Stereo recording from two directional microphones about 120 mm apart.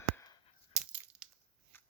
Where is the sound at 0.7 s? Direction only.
5° right (ahead or behind).